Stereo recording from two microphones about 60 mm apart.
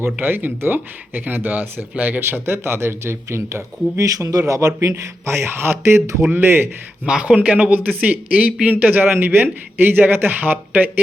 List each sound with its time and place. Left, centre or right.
0.2 s speech: right
2.5 s speech: right
4.0 s a man's voice: right
7.0 s speech: centre; by 11.0 s right